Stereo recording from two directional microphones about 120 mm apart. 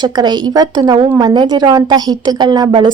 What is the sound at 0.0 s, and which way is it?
Speech, 35° right (ahead or behind).